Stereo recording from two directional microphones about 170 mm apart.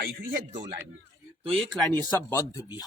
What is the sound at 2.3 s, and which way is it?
Speech, 20° left (ahead or behind).